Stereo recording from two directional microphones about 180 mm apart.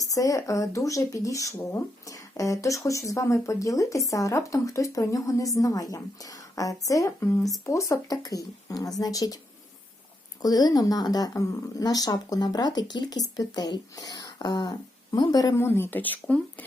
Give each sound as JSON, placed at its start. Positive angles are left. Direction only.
{"t": 0.1, "sound": "speech", "side_deg": 20}
{"t": 10.4, "sound": "speech", "side_deg": 20}